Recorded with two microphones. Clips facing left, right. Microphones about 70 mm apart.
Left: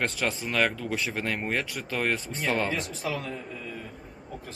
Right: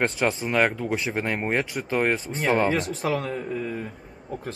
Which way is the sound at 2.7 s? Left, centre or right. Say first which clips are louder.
Right 6 dB; right.